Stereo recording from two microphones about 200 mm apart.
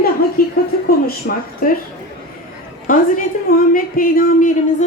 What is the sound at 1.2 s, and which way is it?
Speech, 55° left (ahead or behind).